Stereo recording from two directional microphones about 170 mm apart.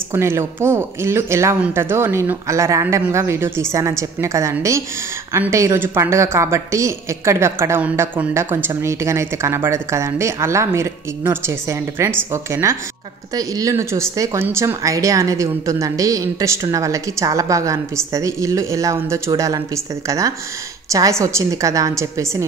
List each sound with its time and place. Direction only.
0.1 s a woman's voice: 15° right (ahead or behind)